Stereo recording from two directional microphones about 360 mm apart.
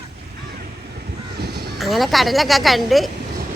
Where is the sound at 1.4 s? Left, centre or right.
Right.